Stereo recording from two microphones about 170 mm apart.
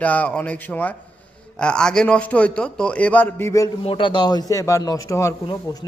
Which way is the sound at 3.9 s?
30° left (ahead or behind).